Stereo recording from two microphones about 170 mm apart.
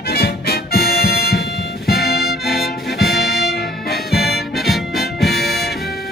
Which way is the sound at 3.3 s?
70° left (ahead or behind).